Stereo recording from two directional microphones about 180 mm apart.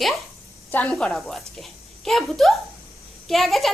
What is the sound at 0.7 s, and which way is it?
Speech, 5° left (ahead or behind).